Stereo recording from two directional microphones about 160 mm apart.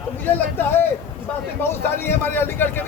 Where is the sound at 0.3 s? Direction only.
15° left (ahead or behind).